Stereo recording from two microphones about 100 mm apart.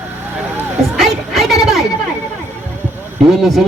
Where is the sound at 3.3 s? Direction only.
Centre (ahead or behind).